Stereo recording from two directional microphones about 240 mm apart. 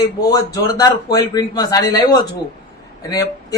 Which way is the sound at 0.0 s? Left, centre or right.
Centre.